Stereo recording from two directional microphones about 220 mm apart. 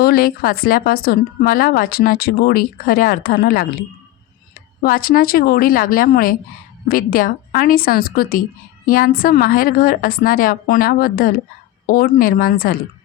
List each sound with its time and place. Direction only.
0.0 s a woman's voice: 45° left (ahead or behind)
4.8 s a woman's voice: 40° left (ahead or behind)